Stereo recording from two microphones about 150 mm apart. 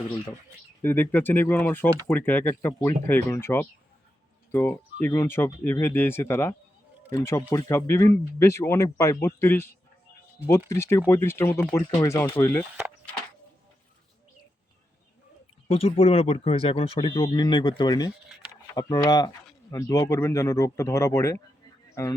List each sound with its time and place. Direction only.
0.8 s speech: 15° left (ahead or behind)
12.7 s a sound: 10° right (ahead or behind)
15.7 s speech: 40° left (ahead or behind); by 22.1 s 15° left (ahead or behind)